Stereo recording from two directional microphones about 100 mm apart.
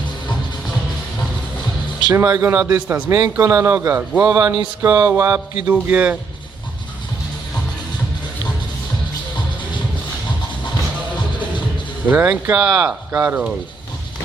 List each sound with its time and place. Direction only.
2.1 s a man's voice: 30° right (ahead or behind)
3.1 s a man's voice: 30° right (ahead or behind)
5.6 s speech: 10° right (ahead or behind)
12.0 s speech: 15° right (ahead or behind)